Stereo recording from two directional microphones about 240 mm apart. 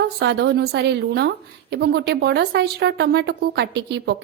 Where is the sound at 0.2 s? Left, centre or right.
Right.